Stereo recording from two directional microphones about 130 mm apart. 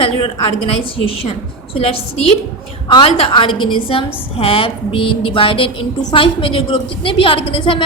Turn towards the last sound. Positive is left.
turn(degrees=40)  # may be behind; listen again after turning